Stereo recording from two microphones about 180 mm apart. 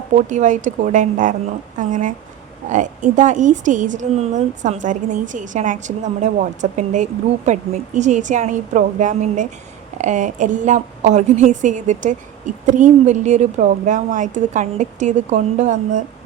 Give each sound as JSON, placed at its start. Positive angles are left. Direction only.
{"t": 0.3, "sound": "speech", "side_deg": -45}